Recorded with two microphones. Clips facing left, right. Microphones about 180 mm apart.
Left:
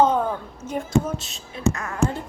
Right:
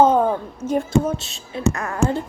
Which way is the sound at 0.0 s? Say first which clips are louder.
Right 4 dB; 45° right (ahead or behind).